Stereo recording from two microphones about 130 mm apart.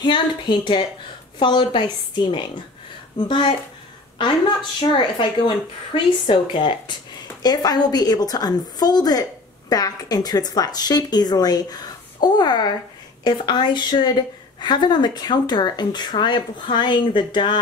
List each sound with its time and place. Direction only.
0.0 s speech: 35° left (ahead or behind)
4.7 s speech: 35° left (ahead or behind)